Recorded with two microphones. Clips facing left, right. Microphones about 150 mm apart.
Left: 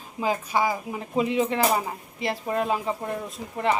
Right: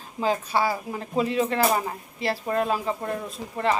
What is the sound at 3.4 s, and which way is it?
Speech, 25° right (ahead or behind).